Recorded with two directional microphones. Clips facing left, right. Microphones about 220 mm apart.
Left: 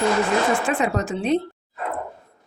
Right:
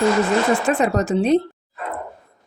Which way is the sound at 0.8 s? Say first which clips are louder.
Right 5 dB; 40° right (ahead or behind).